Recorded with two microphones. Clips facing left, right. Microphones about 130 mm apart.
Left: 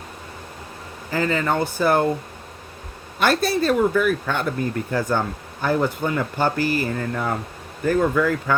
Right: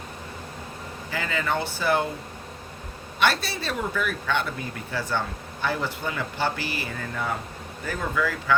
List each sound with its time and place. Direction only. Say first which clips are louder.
1.1 s speech: left 6 dB; 40° left (ahead or behind)
3.2 s speech: left 6 dB; 50° left (ahead or behind)